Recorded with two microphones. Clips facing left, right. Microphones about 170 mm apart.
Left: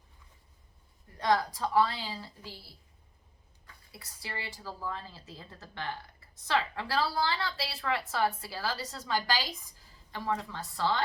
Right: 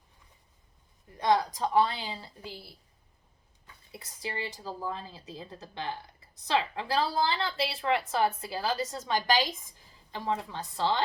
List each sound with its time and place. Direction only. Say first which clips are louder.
1.2 s a woman's voice: right 2 dB; 20° right (ahead or behind)
3.9 s a woman's voice: right 5 dB; 20° right (ahead or behind)